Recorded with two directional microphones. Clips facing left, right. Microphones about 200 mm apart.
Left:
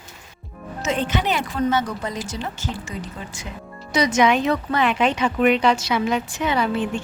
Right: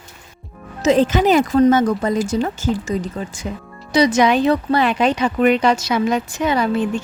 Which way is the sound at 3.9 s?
35° right (ahead or behind).